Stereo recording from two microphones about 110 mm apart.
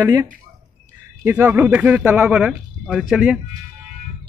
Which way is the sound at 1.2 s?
15° right (ahead or behind).